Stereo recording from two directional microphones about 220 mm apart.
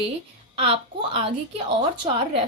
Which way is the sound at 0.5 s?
25° right (ahead or behind).